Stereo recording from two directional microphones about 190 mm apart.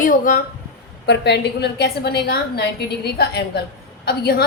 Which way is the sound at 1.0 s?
60° left (ahead or behind).